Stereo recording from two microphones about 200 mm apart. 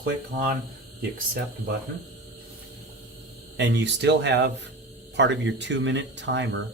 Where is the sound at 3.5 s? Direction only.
60° right (ahead or behind).